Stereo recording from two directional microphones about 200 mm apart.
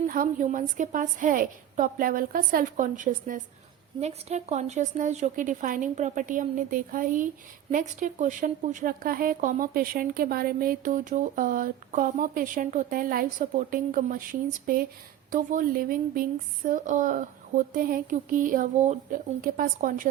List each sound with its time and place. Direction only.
0.1 s a woman's voice: 45° right (ahead or behind)